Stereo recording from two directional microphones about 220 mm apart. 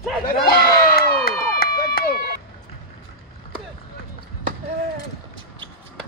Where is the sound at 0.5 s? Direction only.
45° left (ahead or behind).